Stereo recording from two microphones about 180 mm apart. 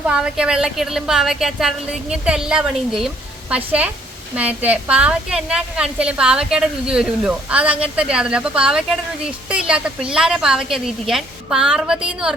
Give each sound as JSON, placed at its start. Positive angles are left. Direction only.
{"t": 0.0, "sound": "a woman's voice", "side_deg": -5}